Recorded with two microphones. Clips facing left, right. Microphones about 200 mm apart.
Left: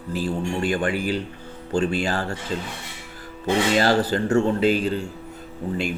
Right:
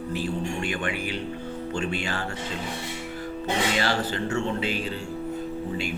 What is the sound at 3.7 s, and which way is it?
A man's voice, 40° left (ahead or behind).